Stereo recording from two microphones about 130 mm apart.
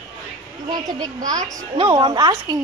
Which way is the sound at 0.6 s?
30° right (ahead or behind).